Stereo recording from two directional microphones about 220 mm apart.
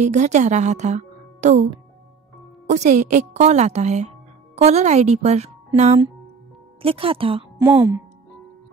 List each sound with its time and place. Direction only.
0.0 s a woman's voice: 30° right (ahead or behind)
7.5 s speech: 15° right (ahead or behind)